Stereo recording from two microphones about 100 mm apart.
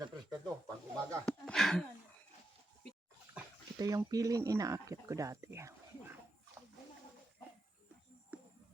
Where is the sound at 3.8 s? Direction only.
35° right (ahead or behind).